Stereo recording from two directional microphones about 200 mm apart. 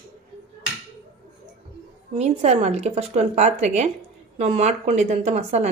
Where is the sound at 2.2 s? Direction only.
35° right (ahead or behind).